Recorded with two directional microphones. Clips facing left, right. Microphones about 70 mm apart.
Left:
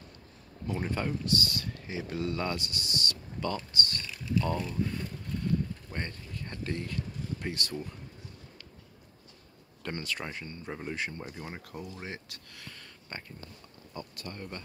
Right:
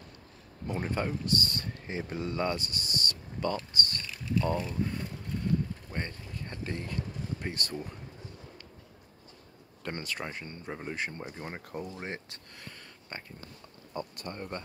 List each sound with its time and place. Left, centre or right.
0.7 s speech: centre
1.2 s speech: right
3.5 s speech: centre
4.5 s speech: centre
9.9 s speech: right
10.7 s speech: centre